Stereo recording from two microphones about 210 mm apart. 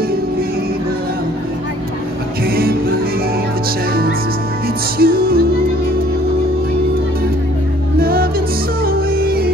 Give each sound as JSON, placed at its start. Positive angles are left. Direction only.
{"t": 2.5, "sound": "music", "side_deg": -45}
{"t": 4.9, "sound": "music", "side_deg": -45}
{"t": 8.0, "sound": "music", "side_deg": -45}